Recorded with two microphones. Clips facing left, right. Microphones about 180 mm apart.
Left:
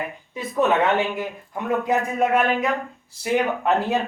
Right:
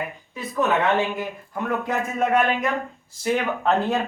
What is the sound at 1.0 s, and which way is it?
Speech, 15° right (ahead or behind).